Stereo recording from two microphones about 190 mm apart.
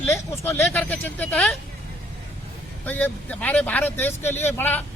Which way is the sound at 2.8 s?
10° left (ahead or behind).